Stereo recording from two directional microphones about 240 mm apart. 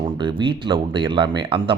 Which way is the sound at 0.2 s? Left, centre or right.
Centre.